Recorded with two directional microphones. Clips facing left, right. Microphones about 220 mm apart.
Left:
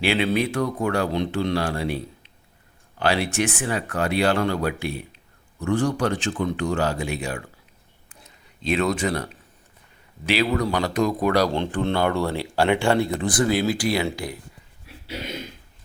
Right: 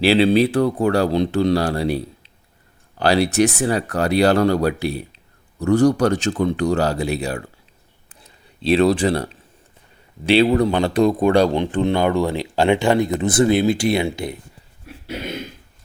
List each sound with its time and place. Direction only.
0.0 s speech: 35° right (ahead or behind)
3.0 s speech: 40° right (ahead or behind)
8.2 s a sound: 35° right (ahead or behind)
10.2 s speech: 30° right (ahead or behind)
11.5 s speech: 15° right (ahead or behind)
14.9 s a sound: 50° right (ahead or behind)